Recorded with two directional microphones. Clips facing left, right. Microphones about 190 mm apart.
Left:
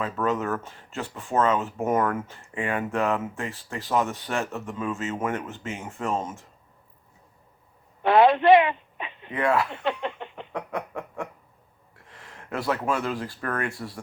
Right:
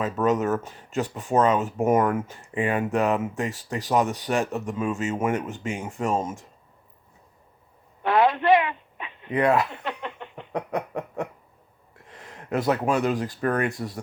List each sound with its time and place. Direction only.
0.0 s speech: 20° right (ahead or behind)
8.0 s a sound: 25° left (ahead or behind)
9.3 s snicker: 20° right (ahead or behind)
9.8 s a sound: 25° left (ahead or behind)
10.5 s snicker: 20° right (ahead or behind)
12.0 s speech: 20° right (ahead or behind)
13.4 s snicker: 20° right (ahead or behind)